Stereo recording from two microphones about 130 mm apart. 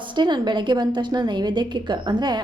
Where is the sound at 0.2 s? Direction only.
35° right (ahead or behind).